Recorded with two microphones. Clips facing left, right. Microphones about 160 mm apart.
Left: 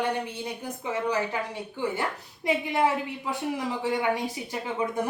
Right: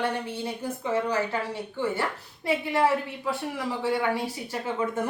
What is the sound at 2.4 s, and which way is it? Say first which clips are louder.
A woman's voice: right 1 dB; 15° left (ahead or behind).